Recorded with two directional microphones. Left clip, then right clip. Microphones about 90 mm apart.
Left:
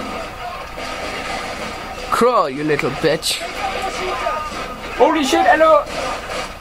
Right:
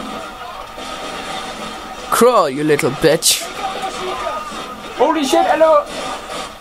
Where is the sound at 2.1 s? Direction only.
30° right (ahead or behind).